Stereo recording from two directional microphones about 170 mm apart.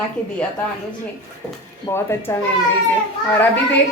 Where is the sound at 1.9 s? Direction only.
15° left (ahead or behind).